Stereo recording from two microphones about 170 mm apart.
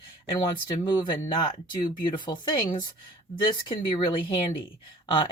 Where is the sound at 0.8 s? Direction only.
25° left (ahead or behind).